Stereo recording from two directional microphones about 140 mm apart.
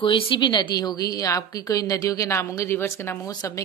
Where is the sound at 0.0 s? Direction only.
35° left (ahead or behind).